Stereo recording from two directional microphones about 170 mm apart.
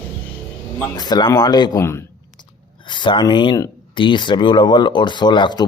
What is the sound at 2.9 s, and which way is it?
Speech, 30° left (ahead or behind).